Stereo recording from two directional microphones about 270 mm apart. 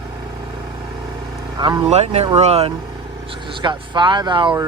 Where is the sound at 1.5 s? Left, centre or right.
Centre.